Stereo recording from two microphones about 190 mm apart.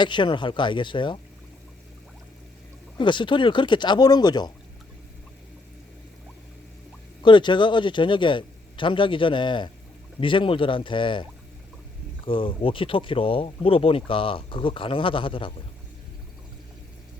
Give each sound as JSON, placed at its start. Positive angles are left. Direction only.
{"t": 0.0, "sound": "speech", "side_deg": 25}
{"t": 3.0, "sound": "speech", "side_deg": 25}
{"t": 7.2, "sound": "speech", "side_deg": 25}